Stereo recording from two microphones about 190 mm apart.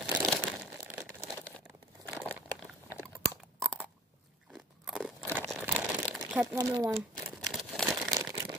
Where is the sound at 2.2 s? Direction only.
10° left (ahead or behind).